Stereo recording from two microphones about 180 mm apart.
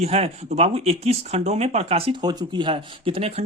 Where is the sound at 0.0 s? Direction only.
35° right (ahead or behind).